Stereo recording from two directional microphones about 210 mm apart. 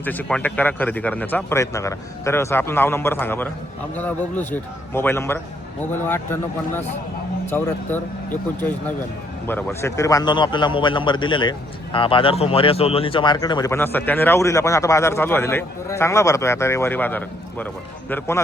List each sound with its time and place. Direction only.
0.0 s a man's voice: 10° left (ahead or behind)
9.5 s a man's voice: 10° left (ahead or behind)